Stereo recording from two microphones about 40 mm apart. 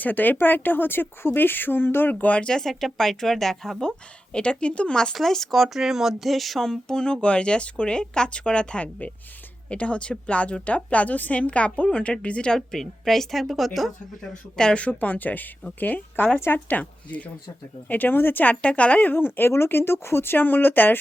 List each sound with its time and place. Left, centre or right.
0.0 s speech: left
2.1 s a woman's voice: left
2.6 s speech: centre
3.8 s speech: centre
5.1 s speech: centre
6.7 s a woman's voice: centre
12.5 s speech: centre
14.2 s speech: centre
14.8 s a woman's voice: left
17.8 s speech: left
18.6 s a woman's voice: left
19.1 s speech: left